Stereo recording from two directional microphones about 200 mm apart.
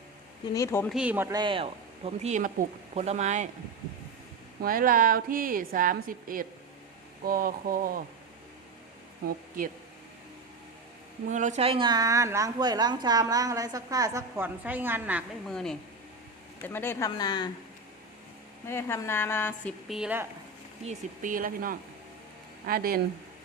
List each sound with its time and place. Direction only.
0.5 s a woman's voice: 15° left (ahead or behind)
0.9 s a woman's voice: 10° right (ahead or behind)
1.4 s speech: 25° right (ahead or behind)
4.6 s a woman's voice: 45° right (ahead or behind)
11.3 s a woman's voice: 40° right (ahead or behind); by 15.2 s 10° right (ahead or behind)
15.4 s a woman's voice: centre (ahead or behind); by 17.5 s 20° left (ahead or behind)
18.7 s a woman's voice: 10° left (ahead or behind)
19.9 s speech: 5° right (ahead or behind)
20.8 s a woman's voice: 40° right (ahead or behind)